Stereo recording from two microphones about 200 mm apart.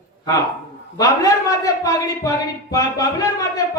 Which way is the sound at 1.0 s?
20° left (ahead or behind).